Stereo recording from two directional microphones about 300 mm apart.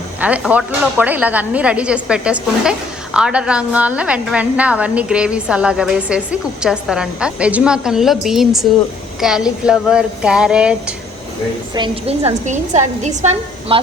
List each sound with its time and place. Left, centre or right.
0.2 s a woman's voice: centre
11.7 s a woman's voice: centre